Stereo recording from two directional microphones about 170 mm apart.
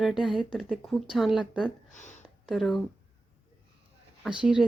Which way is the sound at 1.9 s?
45° left (ahead or behind).